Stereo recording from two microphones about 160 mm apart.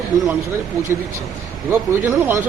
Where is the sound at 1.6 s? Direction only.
15° right (ahead or behind).